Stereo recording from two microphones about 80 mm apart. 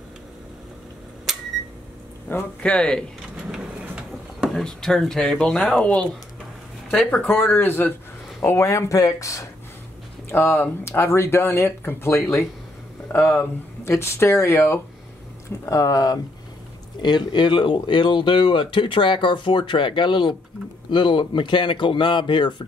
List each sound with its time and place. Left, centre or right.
1.3 s a sound: centre
2.3 s speech: left
2.6 s speech: centre
3.8 s a sound: centre
4.5 s speech: centre
7.5 s speech: left
8.5 s speech: left
10.3 s speech: left
15.6 s speech: left
17.0 s speech: left